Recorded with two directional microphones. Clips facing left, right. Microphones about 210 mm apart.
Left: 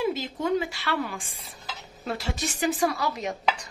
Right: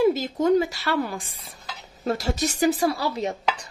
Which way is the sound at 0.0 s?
40° right (ahead or behind).